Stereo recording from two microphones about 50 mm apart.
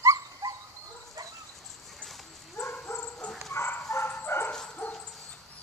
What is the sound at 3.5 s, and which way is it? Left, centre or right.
Bow-wow, left.